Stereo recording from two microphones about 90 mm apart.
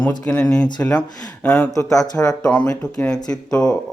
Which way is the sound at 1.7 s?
40° left (ahead or behind).